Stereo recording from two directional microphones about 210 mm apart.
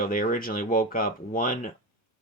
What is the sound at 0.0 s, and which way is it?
Speech, 40° left (ahead or behind).